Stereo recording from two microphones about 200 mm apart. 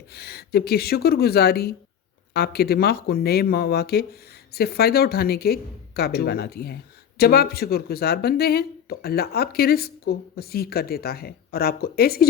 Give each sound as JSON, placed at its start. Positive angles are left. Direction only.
{"t": 0.1, "sound": "speech", "side_deg": 50}